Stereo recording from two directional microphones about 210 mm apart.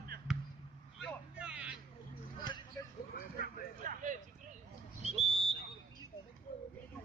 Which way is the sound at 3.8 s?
40° right (ahead or behind).